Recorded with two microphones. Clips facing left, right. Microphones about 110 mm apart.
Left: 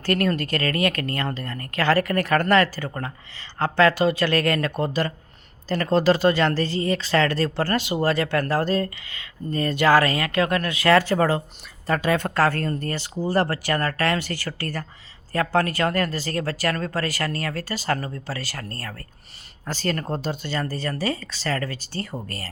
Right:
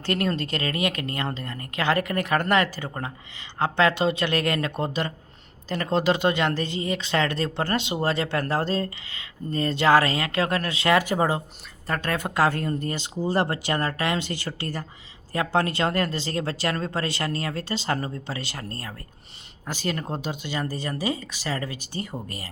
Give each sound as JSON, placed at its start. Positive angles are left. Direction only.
{"t": 0.0, "sound": "speech", "side_deg": -20}
{"t": 10.9, "sound": "speech", "side_deg": -15}
{"t": 11.9, "sound": "speech", "side_deg": 5}
{"t": 12.1, "sound": "speech", "side_deg": -10}